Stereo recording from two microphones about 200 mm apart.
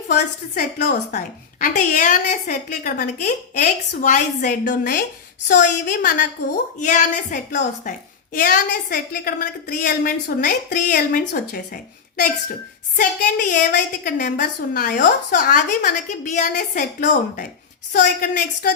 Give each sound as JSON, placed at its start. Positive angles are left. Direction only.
{"t": 0.1, "sound": "a woman's voice", "side_deg": 45}